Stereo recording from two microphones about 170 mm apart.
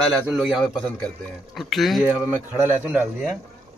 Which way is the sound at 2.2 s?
10° right (ahead or behind).